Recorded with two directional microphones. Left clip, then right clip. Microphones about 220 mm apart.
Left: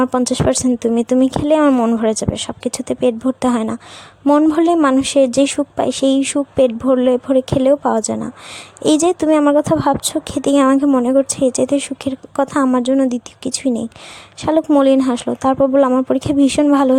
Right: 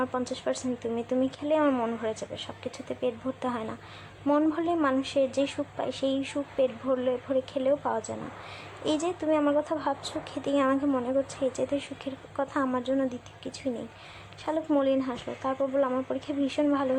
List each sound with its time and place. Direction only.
0.3 s a woman's voice: 55° left (ahead or behind)